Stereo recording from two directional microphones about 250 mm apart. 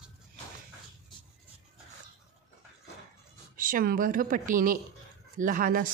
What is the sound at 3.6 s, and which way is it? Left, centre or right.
Speech, right.